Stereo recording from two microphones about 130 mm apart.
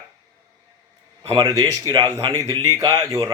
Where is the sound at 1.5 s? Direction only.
30° right (ahead or behind).